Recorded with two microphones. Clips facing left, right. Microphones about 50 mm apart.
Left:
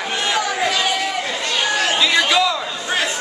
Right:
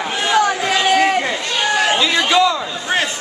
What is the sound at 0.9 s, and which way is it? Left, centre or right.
Chatter, right.